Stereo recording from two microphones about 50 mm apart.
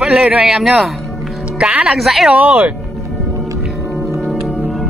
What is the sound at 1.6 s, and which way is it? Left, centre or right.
Speech, right.